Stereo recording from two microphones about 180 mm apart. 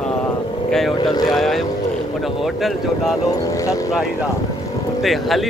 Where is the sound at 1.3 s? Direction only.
Centre (ahead or behind).